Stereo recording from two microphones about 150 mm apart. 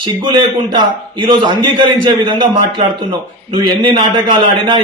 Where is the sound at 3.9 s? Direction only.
30° right (ahead or behind).